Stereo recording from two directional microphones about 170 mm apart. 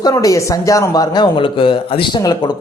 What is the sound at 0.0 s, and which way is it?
Speech, 20° left (ahead or behind).